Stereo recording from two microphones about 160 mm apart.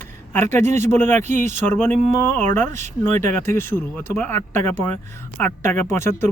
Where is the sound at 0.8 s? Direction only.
15° left (ahead or behind).